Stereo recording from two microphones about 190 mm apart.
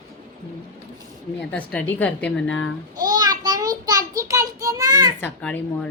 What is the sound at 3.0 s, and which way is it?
A child's voice, 20° right (ahead or behind).